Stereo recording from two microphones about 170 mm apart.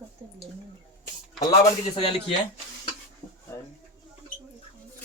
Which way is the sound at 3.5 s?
15° left (ahead or behind).